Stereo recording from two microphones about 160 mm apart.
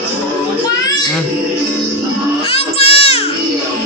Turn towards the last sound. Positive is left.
turn(degrees=40)  # may be behind; listen again after turning